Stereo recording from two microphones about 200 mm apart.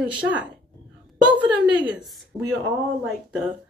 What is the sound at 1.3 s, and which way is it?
Speech, 5° right (ahead or behind).